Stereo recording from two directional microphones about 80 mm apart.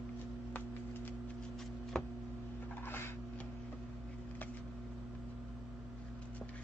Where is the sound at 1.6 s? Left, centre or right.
Centre.